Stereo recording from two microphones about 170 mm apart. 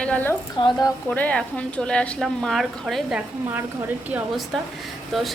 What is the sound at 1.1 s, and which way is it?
A woman's voice, 5° left (ahead or behind).